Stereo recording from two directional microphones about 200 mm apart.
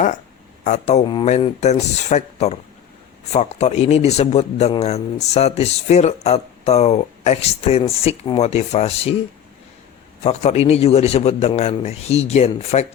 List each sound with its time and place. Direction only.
0.6 s a man's voice: 35° left (ahead or behind)
10.2 s a man's voice: 30° left (ahead or behind)